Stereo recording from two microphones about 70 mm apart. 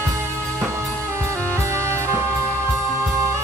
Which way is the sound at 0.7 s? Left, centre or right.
Right.